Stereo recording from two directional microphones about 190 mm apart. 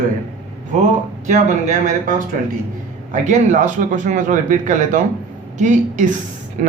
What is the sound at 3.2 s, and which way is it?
Speech, 40° right (ahead or behind).